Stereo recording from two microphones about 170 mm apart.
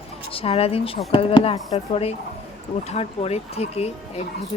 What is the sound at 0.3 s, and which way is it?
Speech, 35° left (ahead or behind).